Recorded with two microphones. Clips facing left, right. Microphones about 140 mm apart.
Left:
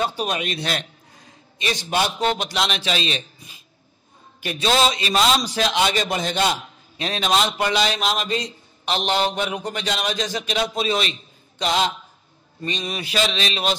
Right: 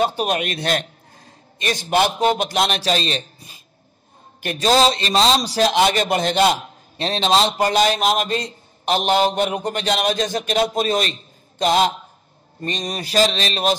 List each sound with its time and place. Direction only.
0.0 s a man's voice: 50° right (ahead or behind)
7.0 s a man's voice: 30° right (ahead or behind)